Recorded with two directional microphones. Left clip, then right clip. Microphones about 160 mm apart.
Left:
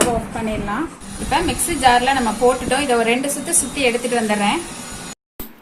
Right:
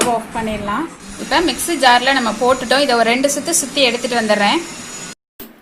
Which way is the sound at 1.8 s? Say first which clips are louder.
Right 2 dB; 40° right (ahead or behind).